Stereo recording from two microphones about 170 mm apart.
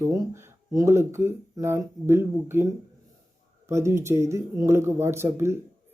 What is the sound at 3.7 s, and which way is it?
Speech, 15° right (ahead or behind).